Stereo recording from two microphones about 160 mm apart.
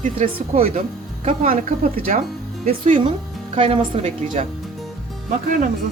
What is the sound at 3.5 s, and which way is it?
Speech, 30° right (ahead or behind).